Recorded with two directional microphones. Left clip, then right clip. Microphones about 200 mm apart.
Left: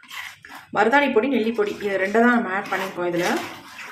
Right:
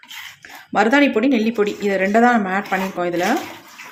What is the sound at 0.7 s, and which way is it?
Speech, 40° right (ahead or behind).